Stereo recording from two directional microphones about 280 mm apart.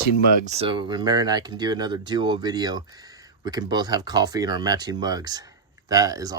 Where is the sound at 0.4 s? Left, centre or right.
Right.